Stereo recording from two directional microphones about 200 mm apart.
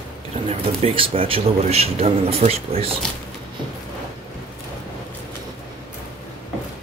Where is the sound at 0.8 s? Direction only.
30° right (ahead or behind).